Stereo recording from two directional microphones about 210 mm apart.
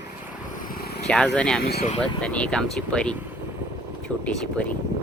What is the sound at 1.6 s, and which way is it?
Speech, 45° left (ahead or behind).